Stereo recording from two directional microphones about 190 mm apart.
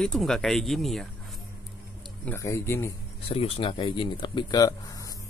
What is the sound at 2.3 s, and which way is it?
Speech, 15° left (ahead or behind).